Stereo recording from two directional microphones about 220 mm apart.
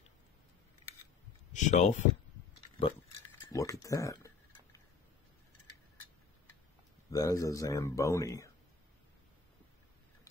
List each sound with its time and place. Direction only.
1.5 s speech: 35° left (ahead or behind)
3.5 s a man's voice: 15° left (ahead or behind)
7.1 s a man's voice: 15° left (ahead or behind)